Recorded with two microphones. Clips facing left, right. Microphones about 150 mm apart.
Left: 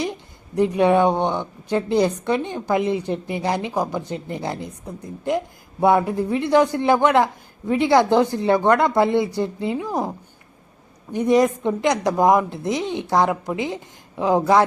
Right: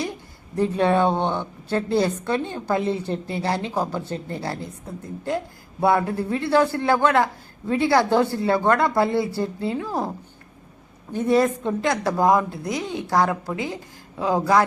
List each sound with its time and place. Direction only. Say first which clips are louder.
0.0 s a woman's voice: left 3 dB; 20° left (ahead or behind)
11.1 s a woman's voice: left 2 dB; 15° left (ahead or behind)